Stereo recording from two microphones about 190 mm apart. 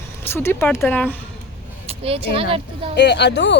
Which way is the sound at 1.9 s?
30° right (ahead or behind).